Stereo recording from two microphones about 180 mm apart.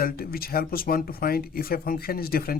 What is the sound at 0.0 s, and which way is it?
Speech, 55° left (ahead or behind).